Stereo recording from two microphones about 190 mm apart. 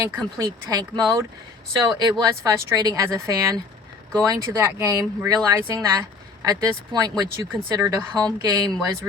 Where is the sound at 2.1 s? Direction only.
20° right (ahead or behind).